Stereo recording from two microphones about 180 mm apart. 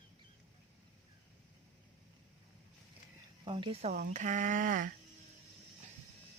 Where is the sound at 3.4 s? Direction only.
30° right (ahead or behind); by 4.9 s 50° right (ahead or behind).